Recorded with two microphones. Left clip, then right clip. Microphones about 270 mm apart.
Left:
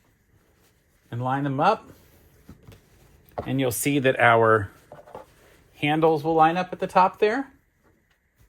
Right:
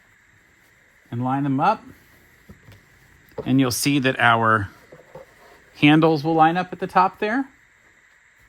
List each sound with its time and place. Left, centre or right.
1.2 s speech: right
3.4 s speech: centre
5.7 s speech: right